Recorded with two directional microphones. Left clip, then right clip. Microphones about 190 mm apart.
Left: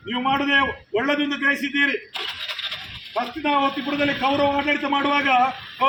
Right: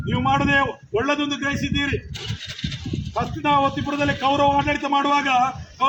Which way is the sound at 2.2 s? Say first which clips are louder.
Left 5 dB; 25° left (ahead or behind).